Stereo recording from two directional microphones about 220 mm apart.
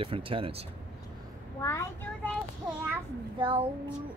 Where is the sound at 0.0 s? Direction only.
25° right (ahead or behind).